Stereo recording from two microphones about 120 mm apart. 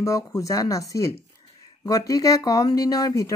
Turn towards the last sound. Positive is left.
turn(degrees=30)  # may be behind; listen again after turning